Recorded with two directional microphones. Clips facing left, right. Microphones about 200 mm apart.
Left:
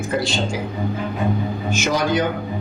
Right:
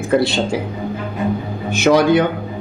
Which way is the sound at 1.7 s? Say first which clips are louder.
Right 9 dB; 60° right (ahead or behind).